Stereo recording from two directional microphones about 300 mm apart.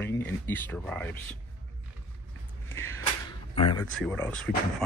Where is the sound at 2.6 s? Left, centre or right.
Centre.